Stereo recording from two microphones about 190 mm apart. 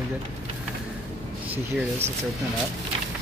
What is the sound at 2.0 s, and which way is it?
Speech, 35° right (ahead or behind).